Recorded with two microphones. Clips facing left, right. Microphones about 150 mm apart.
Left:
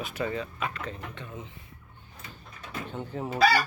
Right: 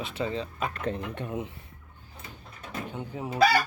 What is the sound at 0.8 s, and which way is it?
Speech, 60° right (ahead or behind).